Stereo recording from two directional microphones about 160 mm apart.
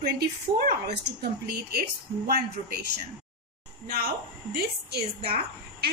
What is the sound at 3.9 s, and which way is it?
A woman's voice, 75° right (ahead or behind).